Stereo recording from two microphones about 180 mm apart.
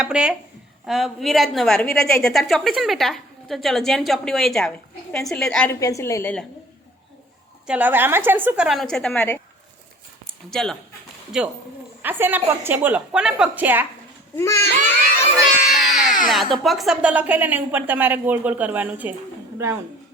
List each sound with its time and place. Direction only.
0.0 s a woman's voice: 5° right (ahead or behind)
5.8 s a woman's voice: 15° left (ahead or behind)
7.7 s a woman's voice: 10° right (ahead or behind); by 9.4 s 10° left (ahead or behind)
10.5 s a woman's voice: 5° left (ahead or behind)
14.3 s a woman's voice: 15° left (ahead or behind)
15.8 s music: centre (ahead or behind)
16.2 s speech: centre (ahead or behind)